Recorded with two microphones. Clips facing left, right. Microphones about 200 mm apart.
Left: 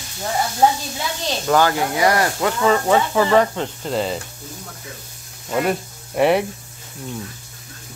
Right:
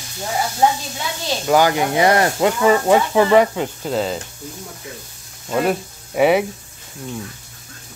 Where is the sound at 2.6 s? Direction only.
15° right (ahead or behind).